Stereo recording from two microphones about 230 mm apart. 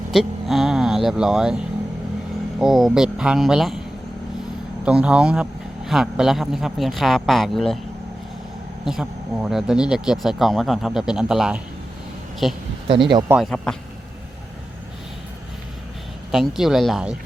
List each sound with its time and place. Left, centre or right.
0.1 s a man's voice: centre
4.9 s a man's voice: centre
8.8 s a man's voice: centre
12.9 s speech: right
13.3 s a man's voice: centre
16.3 s a man's voice: centre